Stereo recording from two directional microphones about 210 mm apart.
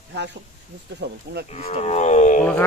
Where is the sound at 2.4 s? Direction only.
5° left (ahead or behind).